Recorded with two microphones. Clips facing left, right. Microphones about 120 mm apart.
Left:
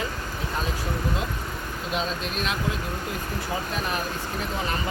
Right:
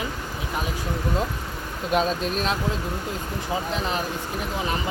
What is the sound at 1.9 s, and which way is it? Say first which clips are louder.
Speech: right 6 dB; 40° right (ahead or behind).